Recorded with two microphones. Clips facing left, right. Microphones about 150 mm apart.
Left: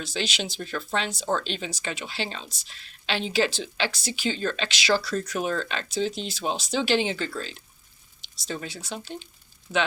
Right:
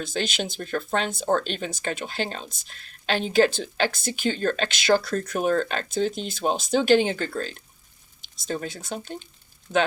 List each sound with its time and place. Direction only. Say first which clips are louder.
0.0 s speech: right 3 dB; 50° right (ahead or behind)
9.7 s speech: right 3 dB; 10° left (ahead or behind)